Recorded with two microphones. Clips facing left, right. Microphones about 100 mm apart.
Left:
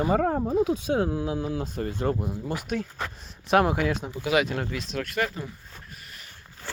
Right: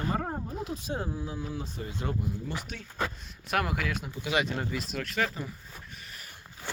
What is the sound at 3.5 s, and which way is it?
Speech, 30° left (ahead or behind).